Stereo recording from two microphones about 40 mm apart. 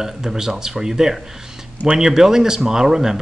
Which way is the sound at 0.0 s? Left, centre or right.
Centre.